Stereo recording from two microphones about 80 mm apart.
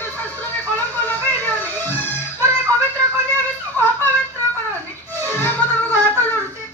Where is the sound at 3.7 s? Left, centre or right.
Left.